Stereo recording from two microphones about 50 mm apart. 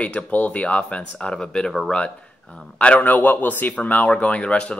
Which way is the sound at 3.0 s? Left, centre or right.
Left.